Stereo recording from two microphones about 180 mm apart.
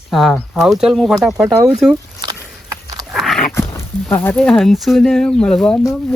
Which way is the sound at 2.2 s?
20° right (ahead or behind).